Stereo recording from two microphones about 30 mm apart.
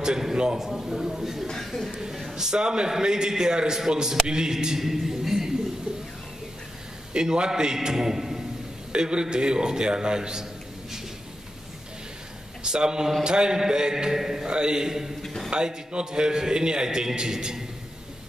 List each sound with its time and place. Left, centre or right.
0.6 s speech: centre
1.6 s speech: centre
2.3 s a man's voice: right
4.7 s a sound: centre
7.2 s a man's voice: right; by 8.5 s centre
8.9 s a man's voice: right
12.6 s a man's voice: right
14.1 s speech: centre
14.4 s a man's voice: right
15.2 s a sound: centre
15.5 s a man's voice: right